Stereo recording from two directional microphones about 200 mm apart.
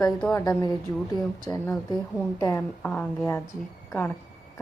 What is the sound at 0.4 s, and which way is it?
A woman's voice, 20° left (ahead or behind).